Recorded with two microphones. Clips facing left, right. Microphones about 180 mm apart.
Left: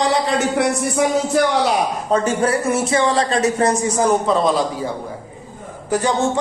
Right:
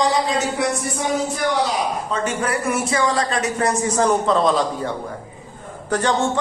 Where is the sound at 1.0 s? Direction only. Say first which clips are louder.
Left 6 dB; 90° left.